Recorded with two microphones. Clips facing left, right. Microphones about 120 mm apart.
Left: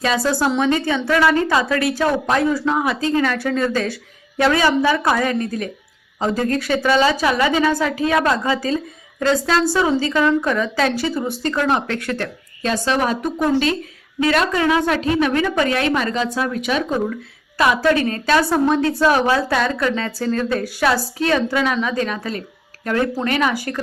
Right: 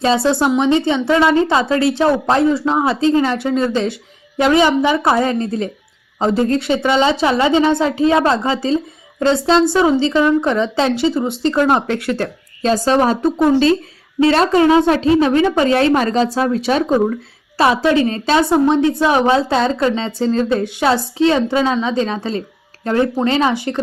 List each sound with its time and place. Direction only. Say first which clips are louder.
0.0 s a woman's voice: right 4 dB; 25° right (ahead or behind)